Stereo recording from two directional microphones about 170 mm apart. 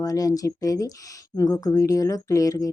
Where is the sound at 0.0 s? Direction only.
20° left (ahead or behind).